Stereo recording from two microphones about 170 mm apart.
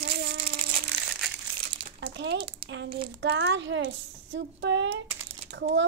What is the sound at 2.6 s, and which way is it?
Speech, 90° right.